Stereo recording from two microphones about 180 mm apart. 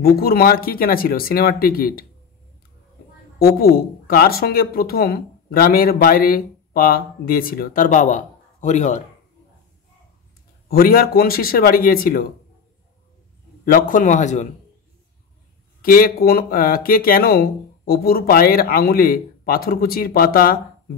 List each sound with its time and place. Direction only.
0.0 s speech: 60° left (ahead or behind)
3.3 s speech: 55° left (ahead or behind); by 9.0 s 40° left (ahead or behind)
10.7 s speech: 55° left (ahead or behind)
13.7 s a man's voice: 50° left (ahead or behind)
15.8 s speech: 55° left (ahead or behind)